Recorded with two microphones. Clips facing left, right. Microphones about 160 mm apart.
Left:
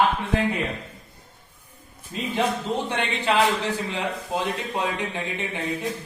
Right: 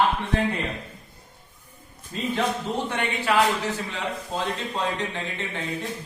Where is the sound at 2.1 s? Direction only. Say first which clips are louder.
Left 1 dB; 15° left (ahead or behind).